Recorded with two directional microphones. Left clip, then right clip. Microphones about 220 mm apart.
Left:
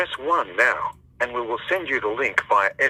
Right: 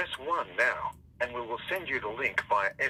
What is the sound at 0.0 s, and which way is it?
Speech, 50° left (ahead or behind).